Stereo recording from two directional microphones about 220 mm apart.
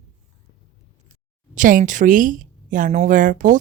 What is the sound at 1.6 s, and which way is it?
A woman's voice, 35° right (ahead or behind).